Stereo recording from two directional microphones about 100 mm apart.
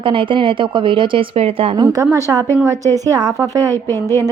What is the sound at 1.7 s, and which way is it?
Speech, 45° right (ahead or behind).